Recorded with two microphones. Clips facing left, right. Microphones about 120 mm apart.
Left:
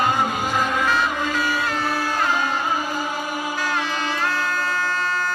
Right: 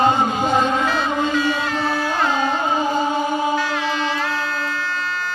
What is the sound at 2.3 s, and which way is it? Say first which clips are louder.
Music: right 3 dB; 25° right (ahead or behind).